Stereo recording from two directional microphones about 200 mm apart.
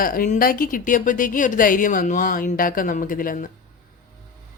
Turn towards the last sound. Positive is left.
turn(degrees=45)  # may be behind; listen again after turning